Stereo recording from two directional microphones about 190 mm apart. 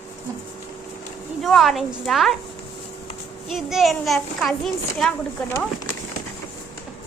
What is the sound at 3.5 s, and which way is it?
A child's voice, centre (ahead or behind).